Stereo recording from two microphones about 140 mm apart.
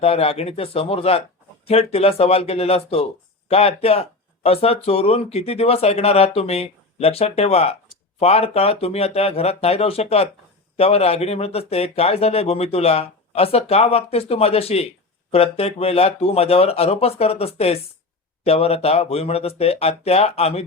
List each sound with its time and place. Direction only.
0.0 s speech: 45° left (ahead or behind)